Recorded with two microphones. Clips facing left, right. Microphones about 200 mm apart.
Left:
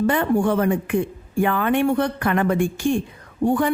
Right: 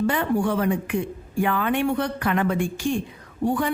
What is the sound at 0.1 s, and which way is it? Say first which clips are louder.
Speech: left 3 dB; 50° left (ahead or behind).